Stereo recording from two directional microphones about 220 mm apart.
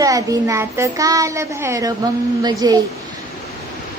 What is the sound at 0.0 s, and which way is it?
A woman's voice, 15° right (ahead or behind).